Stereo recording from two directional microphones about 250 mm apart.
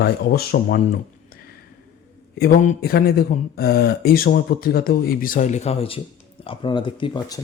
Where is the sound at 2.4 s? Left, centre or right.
Left.